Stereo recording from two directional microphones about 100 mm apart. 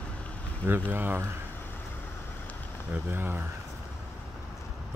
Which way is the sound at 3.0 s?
20° right (ahead or behind).